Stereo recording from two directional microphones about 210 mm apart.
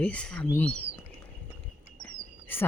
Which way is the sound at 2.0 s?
10° left (ahead or behind).